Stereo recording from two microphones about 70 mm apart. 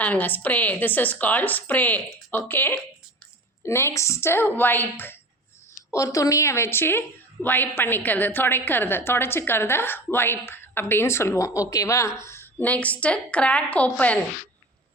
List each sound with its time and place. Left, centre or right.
0.0 s a woman's voice: left
5.9 s a woman's voice: left; by 14.2 s centre